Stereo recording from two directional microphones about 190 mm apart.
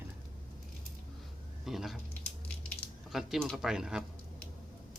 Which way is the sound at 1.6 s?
Centre (ahead or behind).